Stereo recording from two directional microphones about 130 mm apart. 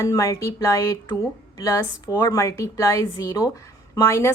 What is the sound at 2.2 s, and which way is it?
A woman's voice, 25° left (ahead or behind).